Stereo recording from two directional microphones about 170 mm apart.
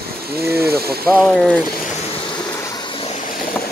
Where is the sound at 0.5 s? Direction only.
65° right (ahead or behind).